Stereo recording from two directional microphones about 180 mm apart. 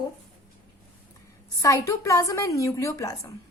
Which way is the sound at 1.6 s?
20° left (ahead or behind).